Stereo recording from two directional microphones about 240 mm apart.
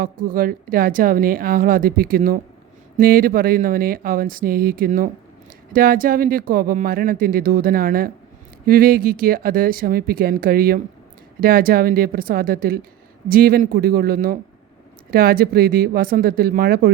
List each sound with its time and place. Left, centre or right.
0.0 s speech: right